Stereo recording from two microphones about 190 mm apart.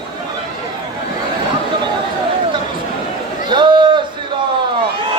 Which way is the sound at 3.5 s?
25° right (ahead or behind).